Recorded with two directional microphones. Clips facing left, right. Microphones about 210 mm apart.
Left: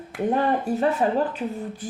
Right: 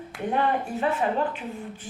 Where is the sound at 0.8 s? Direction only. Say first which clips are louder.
Left 3 dB; 40° left (ahead or behind).